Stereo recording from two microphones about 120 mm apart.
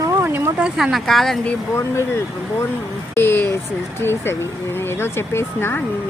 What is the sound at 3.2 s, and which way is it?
Speech, 20° left (ahead or behind).